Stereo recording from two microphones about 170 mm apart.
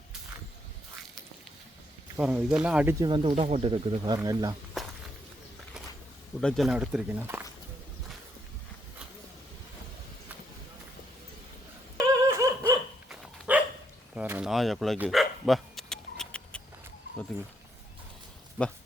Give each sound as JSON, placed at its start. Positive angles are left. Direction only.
{"t": 2.1, "sound": "speech", "side_deg": -10}
{"t": 3.0, "sound": "speech", "side_deg": -30}
{"t": 4.8, "sound": "walk", "side_deg": 0}
{"t": 6.4, "sound": "speech", "side_deg": 0}
{"t": 11.9, "sound": "dog", "side_deg": -20}
{"t": 13.1, "sound": "dog", "side_deg": -5}
{"t": 14.2, "sound": "a sound", "side_deg": -10}
{"t": 14.5, "sound": "speech", "side_deg": 0}
{"t": 14.9, "sound": "dog", "side_deg": -5}